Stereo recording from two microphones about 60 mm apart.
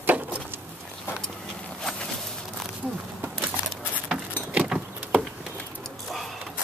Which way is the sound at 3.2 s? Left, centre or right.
Right.